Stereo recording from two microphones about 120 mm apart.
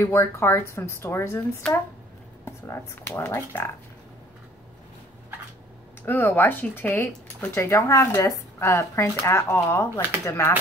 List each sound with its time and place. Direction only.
0.0 s speech: 20° left (ahead or behind)
2.4 s speech: 20° left (ahead or behind)
6.0 s speech: 15° left (ahead or behind)